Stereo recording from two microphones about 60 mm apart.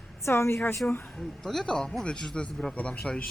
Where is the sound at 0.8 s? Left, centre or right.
Left.